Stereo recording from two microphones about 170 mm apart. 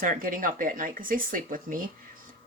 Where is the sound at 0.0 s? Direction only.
55° right (ahead or behind).